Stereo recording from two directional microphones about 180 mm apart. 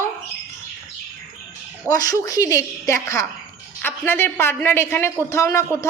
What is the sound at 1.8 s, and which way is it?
Speech, 20° left (ahead or behind).